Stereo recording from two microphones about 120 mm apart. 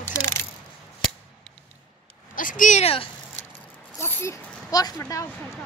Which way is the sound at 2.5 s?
85° left.